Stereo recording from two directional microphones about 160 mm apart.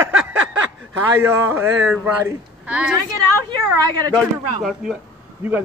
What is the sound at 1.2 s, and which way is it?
Speech, 15° right (ahead or behind).